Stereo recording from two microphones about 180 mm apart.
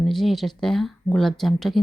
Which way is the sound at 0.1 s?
Centre (ahead or behind).